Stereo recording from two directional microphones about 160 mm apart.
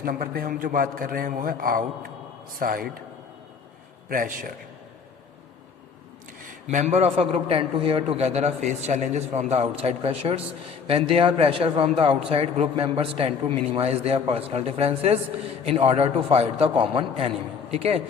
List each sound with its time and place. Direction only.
0.0 s a man's voice: 65° right (ahead or behind)
4.1 s a man's voice: 60° right (ahead or behind)
6.4 s a man's voice: 55° right (ahead or behind); by 18.0 s 40° right (ahead or behind)